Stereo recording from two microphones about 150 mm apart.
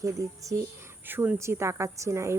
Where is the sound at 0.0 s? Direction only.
20° right (ahead or behind).